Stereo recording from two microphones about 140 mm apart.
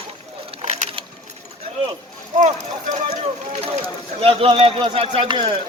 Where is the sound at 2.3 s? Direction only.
60° right (ahead or behind); by 5.6 s 40° right (ahead or behind).